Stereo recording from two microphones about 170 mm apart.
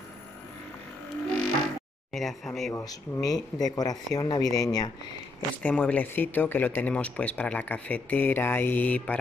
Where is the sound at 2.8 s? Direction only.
20° left (ahead or behind).